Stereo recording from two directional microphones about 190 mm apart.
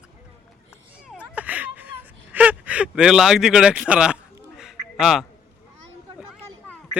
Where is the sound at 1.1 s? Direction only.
5° right (ahead or behind).